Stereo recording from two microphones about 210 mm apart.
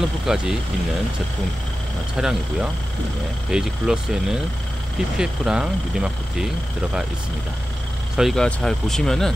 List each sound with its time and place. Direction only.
0.3 s speech: 5° right (ahead or behind)
2.1 s speech: 5° right (ahead or behind)
8.2 s speech: centre (ahead or behind)